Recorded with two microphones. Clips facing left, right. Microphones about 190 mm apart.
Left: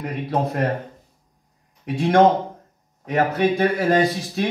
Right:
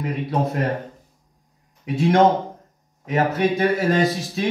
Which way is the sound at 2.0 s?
55° left (ahead or behind).